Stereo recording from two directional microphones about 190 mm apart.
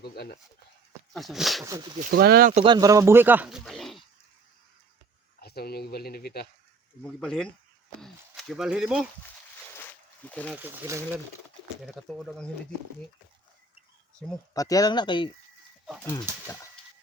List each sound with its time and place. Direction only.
0.0 s speech: 55° left (ahead or behind)
1.1 s speech: centre (ahead or behind)
2.0 s speech: 55° right (ahead or behind)
2.6 s speech: 20° right (ahead or behind); by 4.0 s centre (ahead or behind)
5.4 s speech: 55° left (ahead or behind)
7.0 s speech: 5° left (ahead or behind)
9.7 s a sound: 10° left (ahead or behind)
10.5 s speech: 10° right (ahead or behind)
11.8 s speech: centre (ahead or behind)
14.5 s speech: 20° left (ahead or behind)